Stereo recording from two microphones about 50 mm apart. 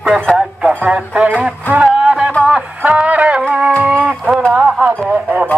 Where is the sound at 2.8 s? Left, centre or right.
Right.